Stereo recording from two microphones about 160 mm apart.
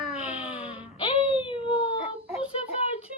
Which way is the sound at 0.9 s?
35° left (ahead or behind).